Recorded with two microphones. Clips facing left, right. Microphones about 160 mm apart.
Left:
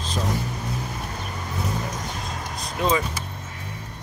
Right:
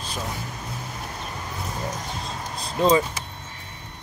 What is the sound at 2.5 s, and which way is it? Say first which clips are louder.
Vehicle: right 4 dB; 30° right (ahead or behind).